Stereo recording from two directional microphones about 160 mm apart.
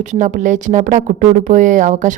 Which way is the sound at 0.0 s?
50° right (ahead or behind).